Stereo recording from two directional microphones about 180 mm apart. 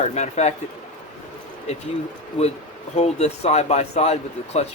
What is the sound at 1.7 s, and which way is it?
Speech, 40° left (ahead or behind).